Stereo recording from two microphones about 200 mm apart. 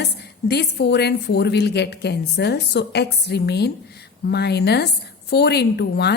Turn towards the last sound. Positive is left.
turn(degrees=55)  # may be behind; listen again after turning